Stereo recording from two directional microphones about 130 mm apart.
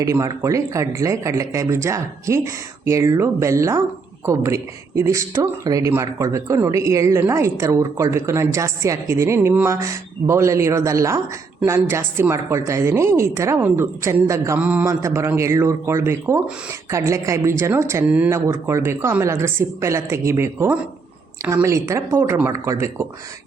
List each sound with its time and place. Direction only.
0.0 s speech: 25° right (ahead or behind)